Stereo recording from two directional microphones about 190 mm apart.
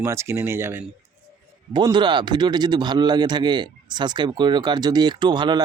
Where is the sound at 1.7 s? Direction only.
25° right (ahead or behind).